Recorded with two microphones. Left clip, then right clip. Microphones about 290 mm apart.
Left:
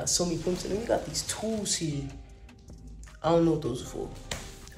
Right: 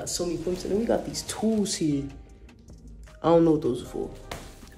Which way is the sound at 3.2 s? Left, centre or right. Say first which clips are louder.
Right 4 dB; right.